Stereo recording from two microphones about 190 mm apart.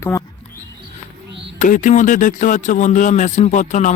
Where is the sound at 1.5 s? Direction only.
40° left (ahead or behind).